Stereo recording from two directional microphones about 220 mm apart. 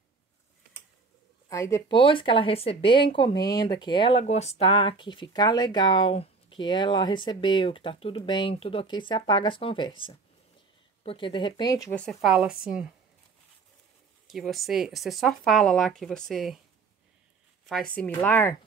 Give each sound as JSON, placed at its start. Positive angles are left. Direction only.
{"t": 1.5, "sound": "speech", "side_deg": 15}
{"t": 11.9, "sound": "speech", "side_deg": 5}
{"t": 14.2, "sound": "speech", "side_deg": 0}
{"t": 17.6, "sound": "speech", "side_deg": 5}